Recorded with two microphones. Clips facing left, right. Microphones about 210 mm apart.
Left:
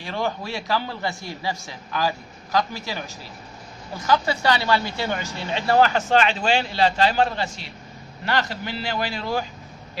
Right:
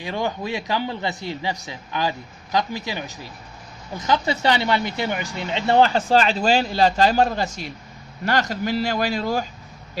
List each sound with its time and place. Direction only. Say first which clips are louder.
0.0 s a man's voice: right 1 dB; 15° right (ahead or behind); by 9.4 s 40° right (ahead or behind)